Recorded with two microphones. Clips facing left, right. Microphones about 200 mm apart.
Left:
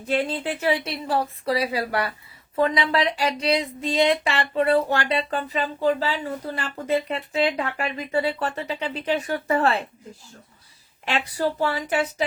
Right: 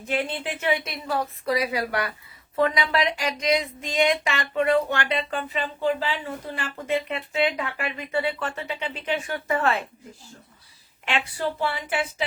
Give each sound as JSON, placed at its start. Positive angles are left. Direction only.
{"t": 0.0, "sound": "speech", "side_deg": 35}
{"t": 11.0, "sound": "speech", "side_deg": 35}